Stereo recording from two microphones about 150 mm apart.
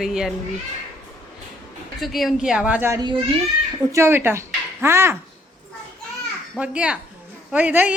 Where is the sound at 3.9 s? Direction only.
15° right (ahead or behind).